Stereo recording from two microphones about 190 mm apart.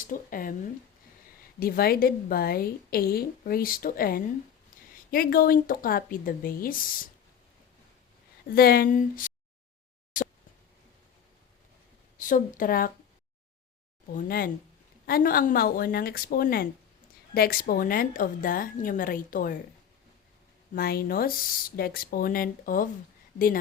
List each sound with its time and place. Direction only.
0.1 s a woman's voice: 45° left (ahead or behind)
1.5 s a woman's voice: 50° left (ahead or behind)
8.4 s a woman's voice: 55° left (ahead or behind)
10.1 s a sound: 45° left (ahead or behind)
12.1 s a woman's voice: 45° left (ahead or behind)
14.1 s a woman's voice: 50° left (ahead or behind)
20.7 s a woman's voice: 55° left (ahead or behind)